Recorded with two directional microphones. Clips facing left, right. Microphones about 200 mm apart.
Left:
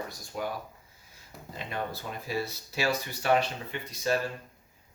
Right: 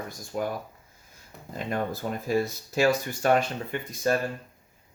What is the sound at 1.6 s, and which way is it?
Speech, 45° right (ahead or behind).